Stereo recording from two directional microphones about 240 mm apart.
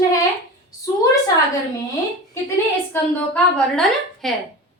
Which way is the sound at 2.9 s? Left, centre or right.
Centre.